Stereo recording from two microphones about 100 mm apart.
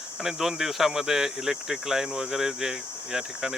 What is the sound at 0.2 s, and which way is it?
Speech, 5° right (ahead or behind).